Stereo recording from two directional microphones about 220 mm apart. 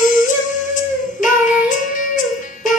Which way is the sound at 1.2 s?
35° left (ahead or behind).